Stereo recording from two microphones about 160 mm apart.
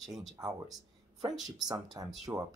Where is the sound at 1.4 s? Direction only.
25° right (ahead or behind).